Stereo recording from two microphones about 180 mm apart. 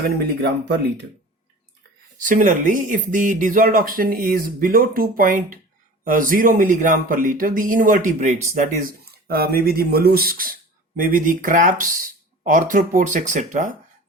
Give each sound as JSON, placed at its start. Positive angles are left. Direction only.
{"t": 0.4, "sound": "speech", "side_deg": -65}
{"t": 2.2, "sound": "speech", "side_deg": -45}